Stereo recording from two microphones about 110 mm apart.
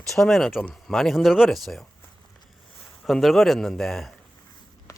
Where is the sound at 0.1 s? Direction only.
5° left (ahead or behind).